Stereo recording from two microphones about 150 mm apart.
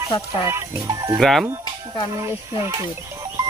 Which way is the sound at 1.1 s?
Centre (ahead or behind).